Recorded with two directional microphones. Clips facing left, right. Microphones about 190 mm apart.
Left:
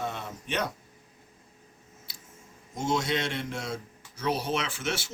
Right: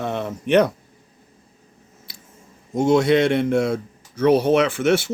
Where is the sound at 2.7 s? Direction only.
60° right (ahead or behind).